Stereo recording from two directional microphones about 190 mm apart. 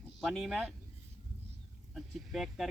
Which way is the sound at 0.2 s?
Centre (ahead or behind).